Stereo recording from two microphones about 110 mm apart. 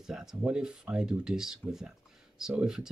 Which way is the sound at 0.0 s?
5° right (ahead or behind).